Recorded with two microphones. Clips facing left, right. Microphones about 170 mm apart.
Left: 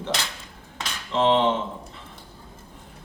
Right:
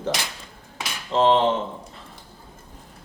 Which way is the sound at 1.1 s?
40° right (ahead or behind).